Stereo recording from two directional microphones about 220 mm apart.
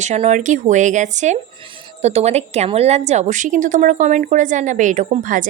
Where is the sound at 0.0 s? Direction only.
30° right (ahead or behind).